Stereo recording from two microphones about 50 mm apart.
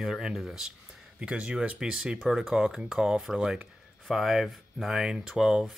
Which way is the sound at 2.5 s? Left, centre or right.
Centre.